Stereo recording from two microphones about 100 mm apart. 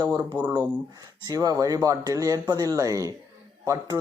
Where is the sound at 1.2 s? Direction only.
40° right (ahead or behind).